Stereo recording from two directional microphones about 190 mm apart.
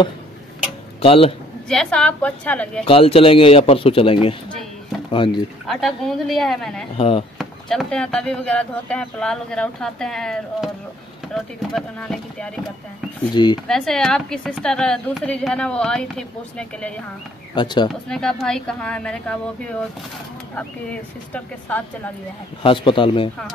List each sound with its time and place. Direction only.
1.0 s speech: 30° left (ahead or behind)
1.7 s speech: 5° left (ahead or behind)
2.8 s speech: 30° left (ahead or behind)
5.7 s speech: centre (ahead or behind)
7.0 s speech: 30° left (ahead or behind)
7.3 s speech: centre (ahead or behind)
13.3 s speech: 25° left (ahead or behind)
13.7 s speech: centre (ahead or behind)
17.6 s speech: 25° left (ahead or behind)
18.0 s speech: 5° left (ahead or behind)
22.6 s speech: 25° left (ahead or behind)